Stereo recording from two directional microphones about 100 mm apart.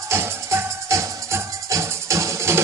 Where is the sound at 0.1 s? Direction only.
30° right (ahead or behind).